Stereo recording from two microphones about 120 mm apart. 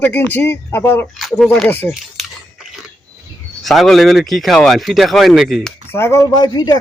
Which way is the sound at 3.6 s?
Centre (ahead or behind).